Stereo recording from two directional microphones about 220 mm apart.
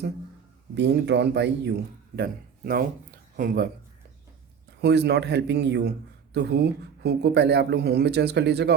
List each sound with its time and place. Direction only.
0.8 s a man's voice: 50° right (ahead or behind)
4.8 s speech: 50° right (ahead or behind)